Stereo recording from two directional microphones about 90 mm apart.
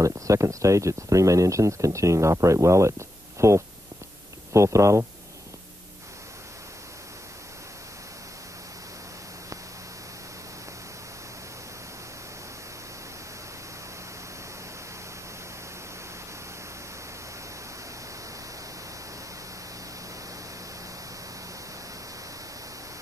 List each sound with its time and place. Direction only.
0.0 s speech: 35° right (ahead or behind)